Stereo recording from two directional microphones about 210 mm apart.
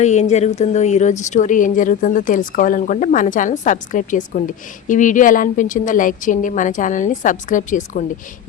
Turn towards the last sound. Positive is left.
turn(degrees=35)  # may be behind; listen again after turning